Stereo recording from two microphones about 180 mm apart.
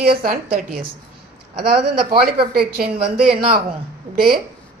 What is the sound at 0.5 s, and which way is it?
Speech, 55° right (ahead or behind).